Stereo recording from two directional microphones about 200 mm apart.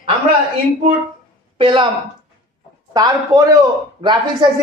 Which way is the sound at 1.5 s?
25° right (ahead or behind).